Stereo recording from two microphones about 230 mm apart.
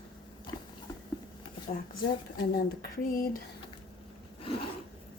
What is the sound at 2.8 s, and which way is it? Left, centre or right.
Speech, left.